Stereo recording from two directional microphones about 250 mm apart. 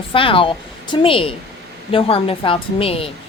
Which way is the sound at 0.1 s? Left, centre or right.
Left.